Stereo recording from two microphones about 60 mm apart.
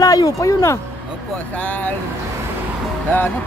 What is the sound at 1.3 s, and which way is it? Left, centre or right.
Speech, left.